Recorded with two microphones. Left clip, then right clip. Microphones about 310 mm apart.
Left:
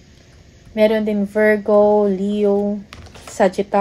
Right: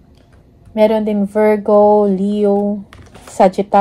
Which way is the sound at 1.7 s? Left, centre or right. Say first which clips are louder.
Right 6 dB; right.